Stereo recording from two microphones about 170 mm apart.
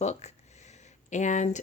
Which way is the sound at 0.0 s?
40° left (ahead or behind).